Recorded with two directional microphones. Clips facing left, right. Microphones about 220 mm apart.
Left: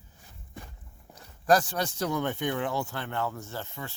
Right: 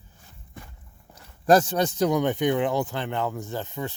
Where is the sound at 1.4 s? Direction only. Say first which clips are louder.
Right 5 dB; 25° right (ahead or behind).